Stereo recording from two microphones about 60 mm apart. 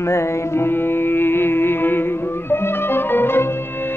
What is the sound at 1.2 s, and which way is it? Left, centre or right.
Music, left.